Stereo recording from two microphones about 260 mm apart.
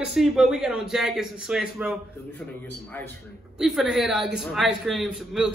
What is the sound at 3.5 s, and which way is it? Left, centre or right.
A man's voice, centre.